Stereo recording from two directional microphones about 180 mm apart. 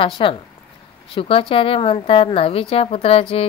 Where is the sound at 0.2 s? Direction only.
25° left (ahead or behind).